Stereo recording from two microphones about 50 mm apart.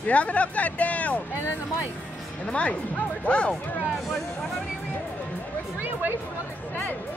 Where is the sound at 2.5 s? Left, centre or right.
Left.